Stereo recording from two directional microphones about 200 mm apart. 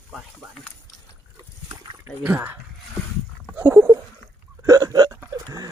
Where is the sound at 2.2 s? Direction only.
10° right (ahead or behind).